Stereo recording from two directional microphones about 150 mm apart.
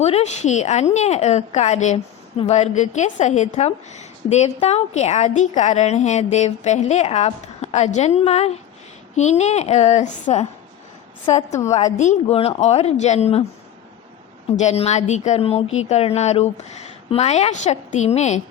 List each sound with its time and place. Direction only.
0.0 s a woman's voice: 45° left (ahead or behind)
11.9 s a woman's voice: 45° left (ahead or behind)
14.5 s a woman's voice: 50° left (ahead or behind)